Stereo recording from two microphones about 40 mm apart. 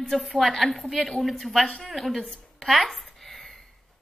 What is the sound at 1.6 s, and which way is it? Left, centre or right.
Speech, centre.